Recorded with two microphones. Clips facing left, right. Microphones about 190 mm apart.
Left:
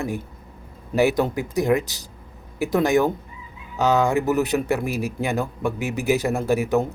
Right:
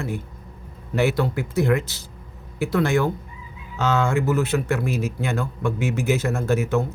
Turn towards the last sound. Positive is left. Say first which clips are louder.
# left 1 dB
turn(degrees=15)  # may be behind; listen again after turning